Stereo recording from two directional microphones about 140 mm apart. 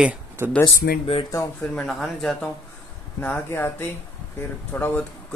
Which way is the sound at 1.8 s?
Centre (ahead or behind).